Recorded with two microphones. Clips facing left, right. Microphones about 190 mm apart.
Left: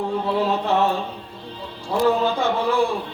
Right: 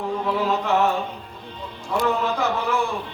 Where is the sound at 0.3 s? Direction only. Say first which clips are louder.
Left 1 dB; 30° left (ahead or behind).